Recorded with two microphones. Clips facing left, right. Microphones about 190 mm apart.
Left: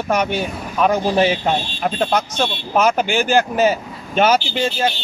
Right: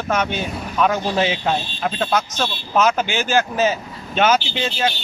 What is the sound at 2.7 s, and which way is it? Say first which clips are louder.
Speech: left 1 dB; 10° left (ahead or behind).